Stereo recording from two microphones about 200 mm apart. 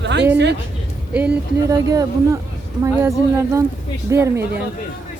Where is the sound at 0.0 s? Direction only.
60° right (ahead or behind).